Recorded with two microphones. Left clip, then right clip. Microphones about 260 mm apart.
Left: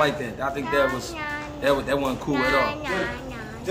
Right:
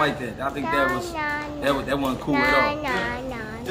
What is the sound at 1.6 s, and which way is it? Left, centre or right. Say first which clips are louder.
Speech: left 2 dB; centre.